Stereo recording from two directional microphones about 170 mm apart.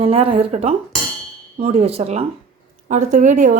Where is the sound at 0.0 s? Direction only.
35° right (ahead or behind).